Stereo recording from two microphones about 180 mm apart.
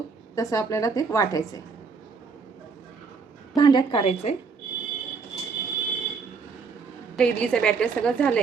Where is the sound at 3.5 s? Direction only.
25° left (ahead or behind).